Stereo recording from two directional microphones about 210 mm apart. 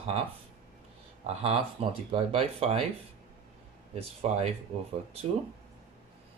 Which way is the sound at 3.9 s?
30° right (ahead or behind).